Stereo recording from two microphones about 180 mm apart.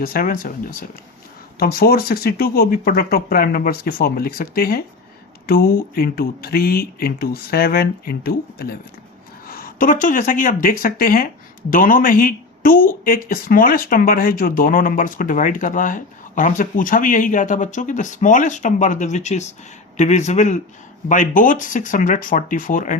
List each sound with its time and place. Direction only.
0.0 s speech: 55° left (ahead or behind)